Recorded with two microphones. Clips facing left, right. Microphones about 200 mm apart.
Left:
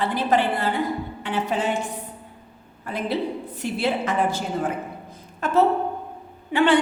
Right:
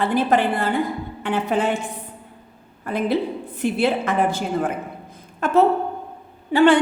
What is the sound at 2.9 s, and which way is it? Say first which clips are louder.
A woman's voice: right 4 dB; 50° right (ahead or behind).